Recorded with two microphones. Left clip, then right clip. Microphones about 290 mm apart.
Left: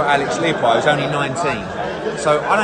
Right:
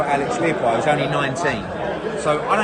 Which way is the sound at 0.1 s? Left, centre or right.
Centre.